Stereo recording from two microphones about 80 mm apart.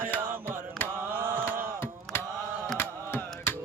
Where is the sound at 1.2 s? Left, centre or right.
Right.